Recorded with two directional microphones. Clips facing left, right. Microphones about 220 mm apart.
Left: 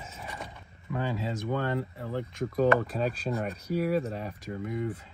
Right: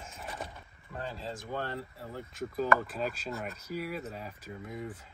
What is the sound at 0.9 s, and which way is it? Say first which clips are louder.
Speech: left 8 dB; 90° left.